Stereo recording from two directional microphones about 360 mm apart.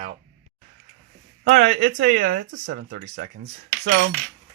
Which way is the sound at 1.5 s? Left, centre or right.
Right.